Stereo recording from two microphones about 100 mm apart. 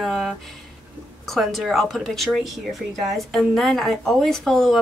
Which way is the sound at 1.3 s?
Centre (ahead or behind).